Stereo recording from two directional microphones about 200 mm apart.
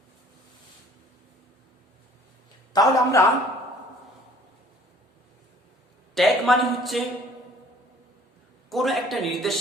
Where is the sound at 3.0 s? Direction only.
15° left (ahead or behind).